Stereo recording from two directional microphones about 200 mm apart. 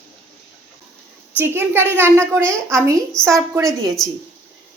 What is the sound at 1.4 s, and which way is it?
A woman's voice, 10° right (ahead or behind).